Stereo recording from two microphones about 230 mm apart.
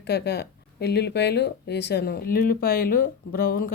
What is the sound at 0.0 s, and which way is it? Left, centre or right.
Speech, left.